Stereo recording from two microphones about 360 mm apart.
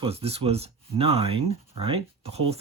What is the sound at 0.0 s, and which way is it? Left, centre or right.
Speech, centre.